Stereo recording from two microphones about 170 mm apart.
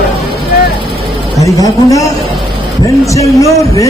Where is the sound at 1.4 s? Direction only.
20° left (ahead or behind).